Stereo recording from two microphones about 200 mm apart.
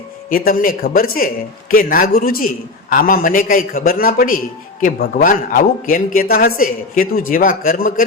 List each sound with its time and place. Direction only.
0.3 s a man's voice: 45° left (ahead or behind)